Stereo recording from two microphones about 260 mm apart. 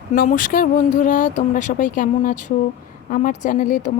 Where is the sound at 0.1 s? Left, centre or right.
Left.